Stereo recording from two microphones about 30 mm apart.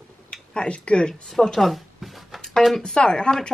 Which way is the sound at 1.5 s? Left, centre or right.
Centre.